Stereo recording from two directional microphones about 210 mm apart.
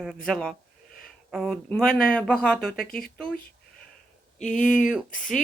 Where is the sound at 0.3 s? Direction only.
Centre (ahead or behind).